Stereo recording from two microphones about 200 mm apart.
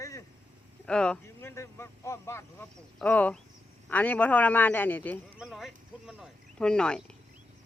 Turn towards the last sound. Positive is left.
turn(degrees=5)  # may be behind; listen again after turning